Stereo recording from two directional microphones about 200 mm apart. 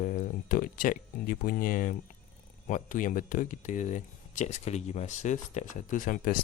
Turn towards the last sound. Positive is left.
turn(degrees=40)  # may be behind; listen again after turning